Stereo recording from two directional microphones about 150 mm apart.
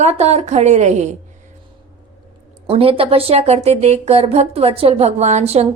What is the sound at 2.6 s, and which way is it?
A woman's voice, 35° right (ahead or behind).